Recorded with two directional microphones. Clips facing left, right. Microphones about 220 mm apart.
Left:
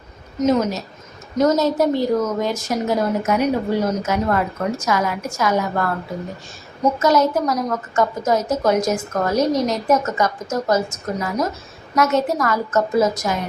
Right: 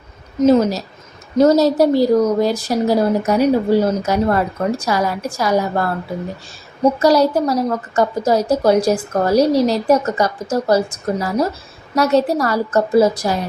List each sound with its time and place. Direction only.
0.3 s a woman's voice: 30° right (ahead or behind)
7.0 s a woman's voice: 35° right (ahead or behind)